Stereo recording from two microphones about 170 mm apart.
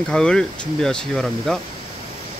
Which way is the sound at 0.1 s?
5° left (ahead or behind).